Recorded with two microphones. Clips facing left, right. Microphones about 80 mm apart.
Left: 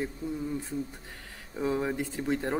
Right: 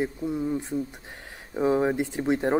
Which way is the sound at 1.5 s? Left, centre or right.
Right.